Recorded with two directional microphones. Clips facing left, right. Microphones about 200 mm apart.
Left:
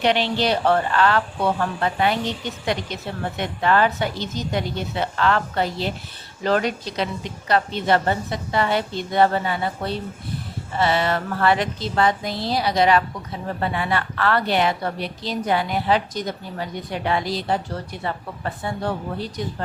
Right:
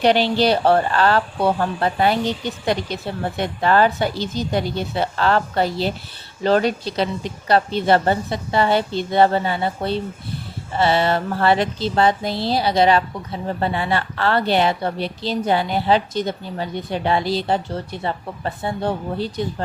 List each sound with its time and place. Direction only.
0.0 s a woman's voice: 35° right (ahead or behind)